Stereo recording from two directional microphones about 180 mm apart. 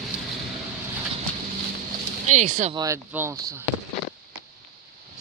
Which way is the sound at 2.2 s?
40° right (ahead or behind).